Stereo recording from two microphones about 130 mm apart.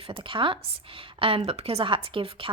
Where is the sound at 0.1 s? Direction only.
40° right (ahead or behind).